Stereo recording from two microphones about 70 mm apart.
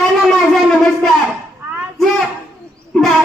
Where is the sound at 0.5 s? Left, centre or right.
Centre.